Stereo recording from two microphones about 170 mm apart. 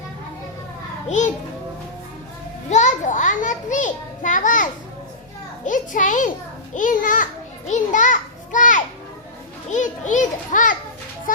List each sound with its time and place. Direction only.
1.0 s a child's voice: 45° left (ahead or behind)
2.6 s a child's voice: 45° left (ahead or behind)